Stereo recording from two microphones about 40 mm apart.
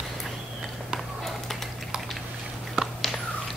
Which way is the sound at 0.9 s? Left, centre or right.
Centre.